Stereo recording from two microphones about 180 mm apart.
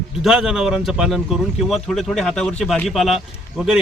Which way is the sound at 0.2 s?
5° right (ahead or behind).